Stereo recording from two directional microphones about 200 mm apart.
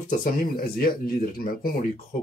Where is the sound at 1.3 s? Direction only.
45° left (ahead or behind).